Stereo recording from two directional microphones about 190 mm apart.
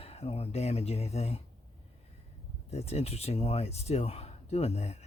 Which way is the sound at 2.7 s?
35° left (ahead or behind).